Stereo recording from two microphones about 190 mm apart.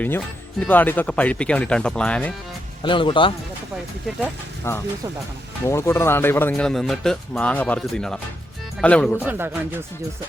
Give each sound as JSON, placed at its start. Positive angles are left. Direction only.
{"t": 0.6, "sound": "speech", "side_deg": 10}
{"t": 2.8, "sound": "speech", "side_deg": 25}
{"t": 4.7, "sound": "speech", "side_deg": 15}
{"t": 9.2, "sound": "a man's voice", "side_deg": -10}